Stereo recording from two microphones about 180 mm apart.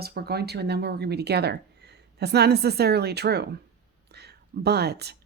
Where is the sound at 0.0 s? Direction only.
60° right (ahead or behind).